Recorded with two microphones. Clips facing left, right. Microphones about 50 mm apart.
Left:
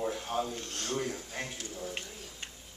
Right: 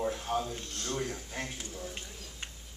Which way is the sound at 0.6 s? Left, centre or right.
Left.